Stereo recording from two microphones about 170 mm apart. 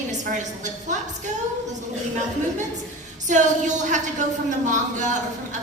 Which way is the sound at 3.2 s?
45° right (ahead or behind).